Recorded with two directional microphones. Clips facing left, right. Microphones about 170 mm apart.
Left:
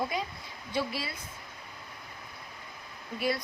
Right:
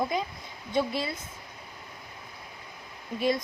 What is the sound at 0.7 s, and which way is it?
Speech, 20° right (ahead or behind).